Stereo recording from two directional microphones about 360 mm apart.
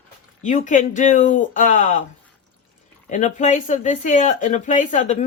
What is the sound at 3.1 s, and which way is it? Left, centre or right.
Speech, centre.